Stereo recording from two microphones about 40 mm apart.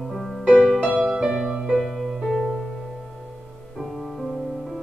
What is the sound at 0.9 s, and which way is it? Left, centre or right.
Music, centre.